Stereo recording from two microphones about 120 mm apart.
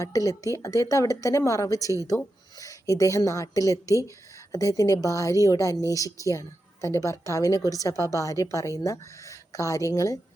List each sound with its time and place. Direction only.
0.0 s a woman's voice: 30° left (ahead or behind)